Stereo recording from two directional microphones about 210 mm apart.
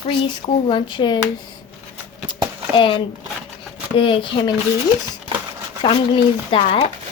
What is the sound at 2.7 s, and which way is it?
A woman's voice, 25° left (ahead or behind).